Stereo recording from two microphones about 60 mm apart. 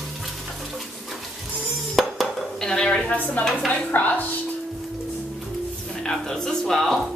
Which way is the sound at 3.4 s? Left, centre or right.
Left.